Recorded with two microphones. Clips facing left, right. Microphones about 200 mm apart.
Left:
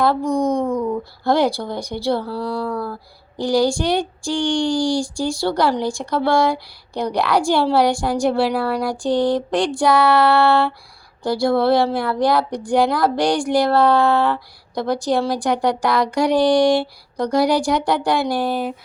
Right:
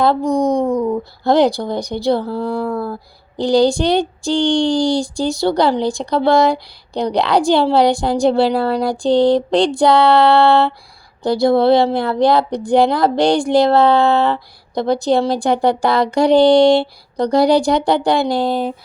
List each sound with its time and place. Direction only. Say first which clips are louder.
0.3 s speech: right 3 dB; 35° right (ahead or behind)
1.2 s speech: right 4 dB; 20° right (ahead or behind)